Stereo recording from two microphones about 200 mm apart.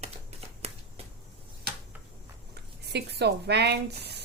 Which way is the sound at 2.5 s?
55° right (ahead or behind).